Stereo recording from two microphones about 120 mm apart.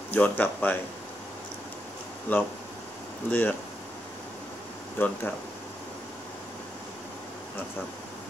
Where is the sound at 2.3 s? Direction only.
15° left (ahead or behind).